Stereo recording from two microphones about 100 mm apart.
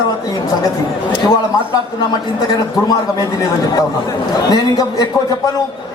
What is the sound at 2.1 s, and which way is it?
A man's voice, 40° left (ahead or behind).